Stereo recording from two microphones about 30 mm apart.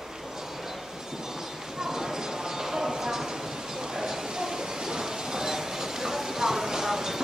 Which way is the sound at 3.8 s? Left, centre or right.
Centre.